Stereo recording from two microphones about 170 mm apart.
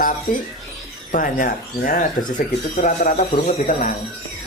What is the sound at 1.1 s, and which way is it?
Speech, 50° left (ahead or behind).